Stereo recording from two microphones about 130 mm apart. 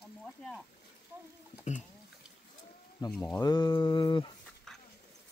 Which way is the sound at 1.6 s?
65° left (ahead or behind).